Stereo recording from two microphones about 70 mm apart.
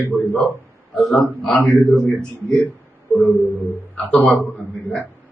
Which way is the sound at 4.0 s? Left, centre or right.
Centre.